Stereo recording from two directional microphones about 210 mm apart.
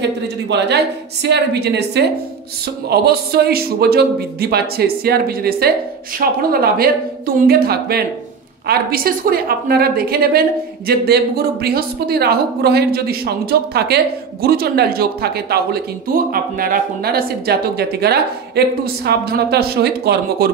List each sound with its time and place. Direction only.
0.0 s speech: 55° right (ahead or behind)